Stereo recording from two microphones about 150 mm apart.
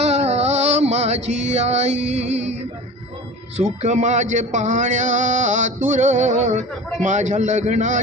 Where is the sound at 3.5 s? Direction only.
50° right (ahead or behind).